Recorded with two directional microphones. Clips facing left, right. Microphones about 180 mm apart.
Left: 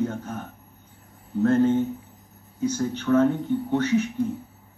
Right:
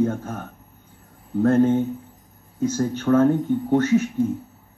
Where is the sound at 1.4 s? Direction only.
55° right (ahead or behind).